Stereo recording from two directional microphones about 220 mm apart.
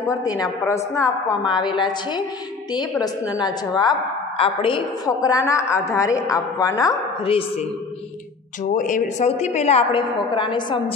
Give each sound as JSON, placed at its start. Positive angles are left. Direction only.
{"t": 0.0, "sound": "a woman's voice", "side_deg": 15}
{"t": 8.7, "sound": "a woman's voice", "side_deg": 35}